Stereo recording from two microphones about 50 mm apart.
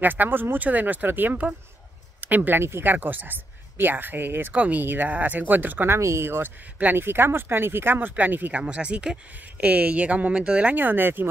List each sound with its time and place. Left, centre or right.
0.0 s speech: right
4.6 s speech: right
5.9 s speech: right
8.5 s speech: right
10.8 s speech: right